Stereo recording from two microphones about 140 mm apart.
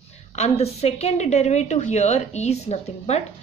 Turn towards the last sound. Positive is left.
turn(degrees=50)  # may be behind; listen again after turning